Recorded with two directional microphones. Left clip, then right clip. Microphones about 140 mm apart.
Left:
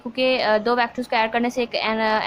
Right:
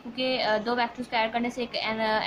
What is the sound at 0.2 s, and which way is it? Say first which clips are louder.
A woman's voice: left 7 dB; 40° left (ahead or behind).